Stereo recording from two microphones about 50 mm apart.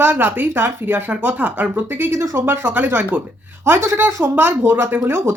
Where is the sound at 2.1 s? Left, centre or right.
Right.